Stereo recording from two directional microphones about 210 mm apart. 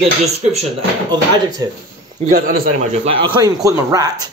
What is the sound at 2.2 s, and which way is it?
Speech, 45° right (ahead or behind).